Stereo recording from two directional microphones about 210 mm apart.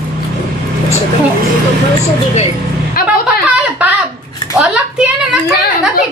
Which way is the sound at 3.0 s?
45° left (ahead or behind).